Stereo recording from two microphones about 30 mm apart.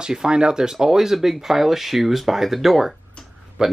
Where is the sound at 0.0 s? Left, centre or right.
Right.